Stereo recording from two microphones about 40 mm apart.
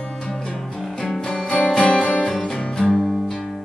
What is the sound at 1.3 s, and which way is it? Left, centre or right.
Music, left.